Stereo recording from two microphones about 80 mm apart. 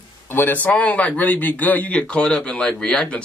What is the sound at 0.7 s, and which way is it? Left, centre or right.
Speech, centre.